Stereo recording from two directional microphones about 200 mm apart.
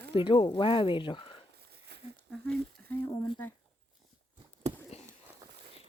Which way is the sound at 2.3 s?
5° left (ahead or behind).